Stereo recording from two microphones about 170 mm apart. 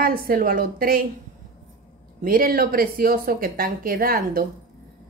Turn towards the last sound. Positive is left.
turn(degrees=-60)  # may be behind; listen again after turning